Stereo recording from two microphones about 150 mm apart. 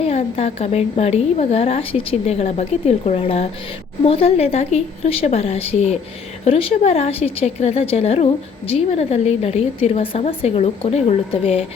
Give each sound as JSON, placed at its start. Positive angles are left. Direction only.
{"t": 0.0, "sound": "a woman's voice", "side_deg": 45}